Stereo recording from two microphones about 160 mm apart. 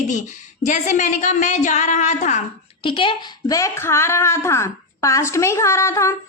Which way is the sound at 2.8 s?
30° left (ahead or behind).